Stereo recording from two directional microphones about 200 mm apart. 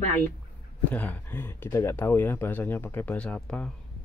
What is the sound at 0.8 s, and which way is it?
Speech, 10° left (ahead or behind).